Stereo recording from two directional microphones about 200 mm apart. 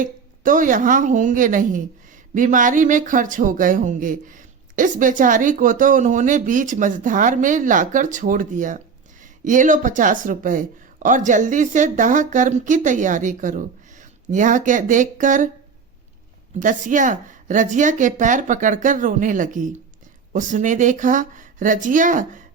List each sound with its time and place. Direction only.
0.0 s speech: 40° right (ahead or behind)
16.6 s speech: 40° right (ahead or behind)